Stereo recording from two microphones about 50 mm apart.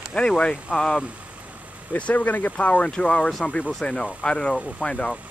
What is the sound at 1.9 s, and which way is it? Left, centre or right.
Speech, left.